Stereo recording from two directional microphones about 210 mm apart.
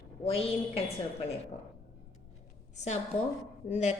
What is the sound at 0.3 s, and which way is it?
Speech, 25° left (ahead or behind).